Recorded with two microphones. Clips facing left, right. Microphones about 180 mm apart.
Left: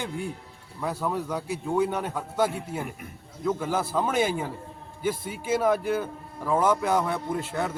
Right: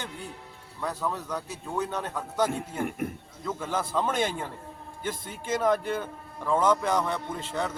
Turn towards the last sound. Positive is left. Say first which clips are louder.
# left 3 dB
turn(degrees=10)  # may be behind; listen again after turning